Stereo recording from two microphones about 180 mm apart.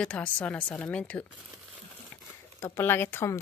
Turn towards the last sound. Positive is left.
turn(degrees=15)  # may be behind; listen again after turning